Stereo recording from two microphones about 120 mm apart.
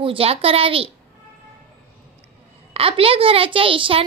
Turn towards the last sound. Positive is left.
turn(degrees=-50)  # may be behind; listen again after turning